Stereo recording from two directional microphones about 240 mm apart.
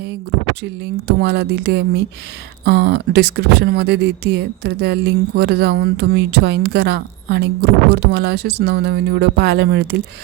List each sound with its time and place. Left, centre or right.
0.6 s speech: right